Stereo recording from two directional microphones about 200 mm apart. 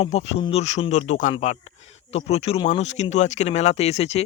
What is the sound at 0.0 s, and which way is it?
Speech, 30° left (ahead or behind).